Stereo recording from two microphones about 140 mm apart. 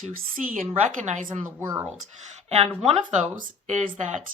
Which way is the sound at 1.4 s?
20° right (ahead or behind).